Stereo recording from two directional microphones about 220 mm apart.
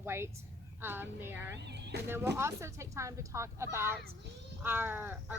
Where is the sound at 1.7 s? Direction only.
50° right (ahead or behind).